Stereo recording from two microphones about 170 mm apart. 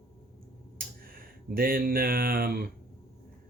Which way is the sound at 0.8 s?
60° right (ahead or behind).